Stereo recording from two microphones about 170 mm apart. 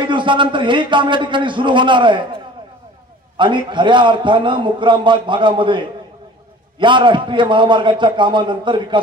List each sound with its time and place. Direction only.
0.0 s a man's voice: 30° right (ahead or behind)